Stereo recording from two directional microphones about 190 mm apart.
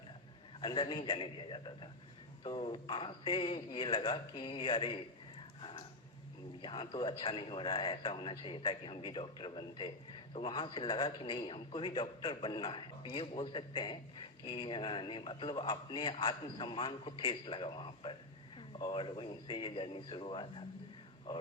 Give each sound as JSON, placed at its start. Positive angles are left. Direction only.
{"t": 0.6, "sound": "a man's voice", "side_deg": 25}
{"t": 5.5, "sound": "a sound", "side_deg": 30}
{"t": 6.6, "sound": "a man's voice", "side_deg": 25}